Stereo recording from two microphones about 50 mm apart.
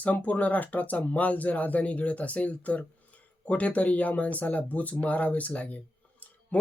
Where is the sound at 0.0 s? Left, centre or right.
Left.